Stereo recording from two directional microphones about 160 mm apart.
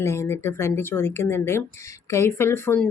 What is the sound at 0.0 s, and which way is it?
Speech, 15° left (ahead or behind).